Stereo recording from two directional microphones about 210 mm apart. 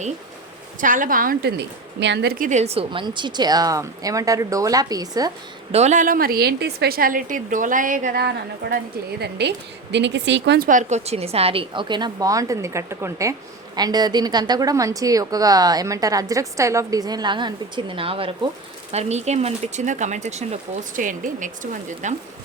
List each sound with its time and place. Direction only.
0.8 s a woman's voice: 40° right (ahead or behind); by 5.3 s 20° right (ahead or behind)
5.7 s a woman's voice: 35° right (ahead or behind); by 10.7 s 55° right (ahead or behind)
10.7 s a woman's voice: 35° right (ahead or behind)